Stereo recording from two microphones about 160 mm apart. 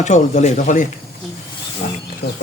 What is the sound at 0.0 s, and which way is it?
Speech, 45° left (ahead or behind).